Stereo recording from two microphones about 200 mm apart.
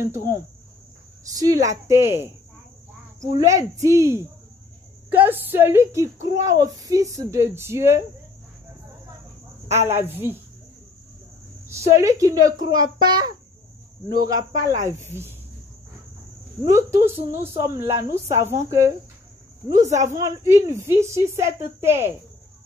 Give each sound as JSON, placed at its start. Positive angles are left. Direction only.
{"t": 1.3, "sound": "a woman's voice", "side_deg": -15}
{"t": 3.3, "sound": "a woman's voice", "side_deg": -15}
{"t": 9.7, "sound": "a woman's voice", "side_deg": -15}
{"t": 11.6, "sound": "a woman's voice", "side_deg": -15}
{"t": 16.6, "sound": "a woman's voice", "side_deg": -15}
{"t": 19.9, "sound": "speech", "side_deg": -35}
{"t": 20.2, "sound": "a woman's voice", "side_deg": -15}